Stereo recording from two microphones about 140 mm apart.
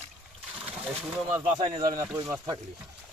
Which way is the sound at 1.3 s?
15° right (ahead or behind).